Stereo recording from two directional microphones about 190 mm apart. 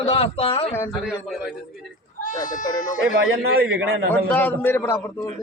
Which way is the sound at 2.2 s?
45° left (ahead or behind).